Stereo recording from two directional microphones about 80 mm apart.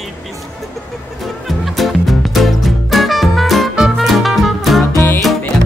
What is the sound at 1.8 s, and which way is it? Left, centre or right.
Music, centre.